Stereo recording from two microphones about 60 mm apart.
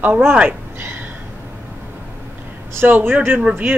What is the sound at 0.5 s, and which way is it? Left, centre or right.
Speech, right.